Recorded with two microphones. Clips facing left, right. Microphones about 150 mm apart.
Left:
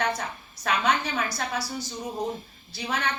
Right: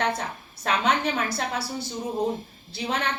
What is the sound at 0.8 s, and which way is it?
A woman's voice, 25° right (ahead or behind).